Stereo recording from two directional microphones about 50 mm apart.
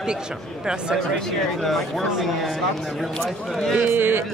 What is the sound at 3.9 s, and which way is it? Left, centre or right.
Speech, right.